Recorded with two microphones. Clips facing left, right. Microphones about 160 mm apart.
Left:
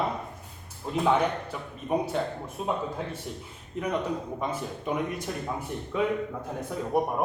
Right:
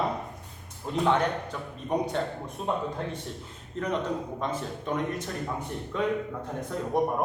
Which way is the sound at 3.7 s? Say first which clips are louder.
Even; 10° left (ahead or behind).